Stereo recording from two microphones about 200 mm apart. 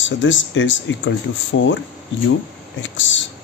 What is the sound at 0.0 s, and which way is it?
Speech, 70° left (ahead or behind).